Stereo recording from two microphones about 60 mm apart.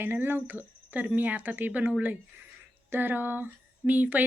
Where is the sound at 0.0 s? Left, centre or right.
Right.